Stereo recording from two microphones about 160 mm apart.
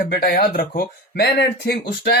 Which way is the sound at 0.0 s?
75° left (ahead or behind).